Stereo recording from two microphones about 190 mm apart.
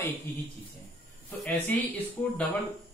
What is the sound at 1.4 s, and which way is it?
Speech, 10° left (ahead or behind).